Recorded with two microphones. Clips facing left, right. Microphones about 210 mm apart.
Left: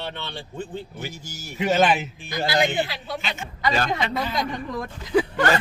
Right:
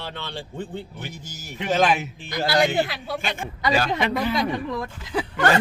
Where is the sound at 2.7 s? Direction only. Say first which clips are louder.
Right 2 dB; 50° right (ahead or behind).